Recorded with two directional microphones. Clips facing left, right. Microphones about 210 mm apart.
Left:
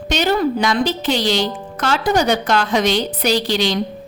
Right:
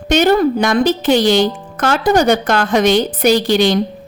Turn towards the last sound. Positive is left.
turn(degrees=-50)  # may be behind; listen again after turning